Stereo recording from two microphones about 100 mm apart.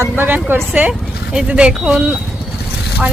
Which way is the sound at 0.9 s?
10° right (ahead or behind).